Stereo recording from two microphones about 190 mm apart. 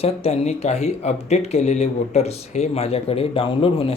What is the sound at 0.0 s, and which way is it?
Speech, 30° left (ahead or behind).